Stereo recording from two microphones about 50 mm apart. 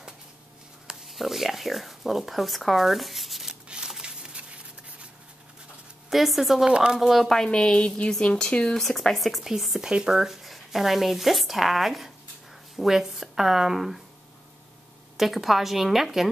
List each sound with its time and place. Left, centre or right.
0.8 s speech: centre
3.6 s a sound: centre
6.0 s speech: centre
6.6 s speech: centre
7.0 s speech: centre
7.3 s a woman's voice: centre
8.8 s speech: centre
9.8 s speech: centre
15.1 s speech: centre